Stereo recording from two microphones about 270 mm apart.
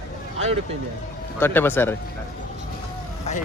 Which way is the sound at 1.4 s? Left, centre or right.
Centre.